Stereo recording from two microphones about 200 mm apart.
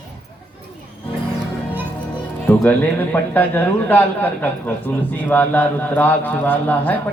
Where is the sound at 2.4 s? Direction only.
10° left (ahead or behind).